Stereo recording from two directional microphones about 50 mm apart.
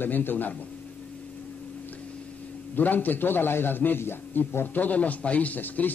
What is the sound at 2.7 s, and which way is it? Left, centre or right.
A man's voice, left.